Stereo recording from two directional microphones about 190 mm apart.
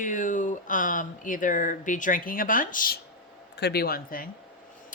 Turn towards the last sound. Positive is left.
turn(degrees=50)  # may be behind; listen again after turning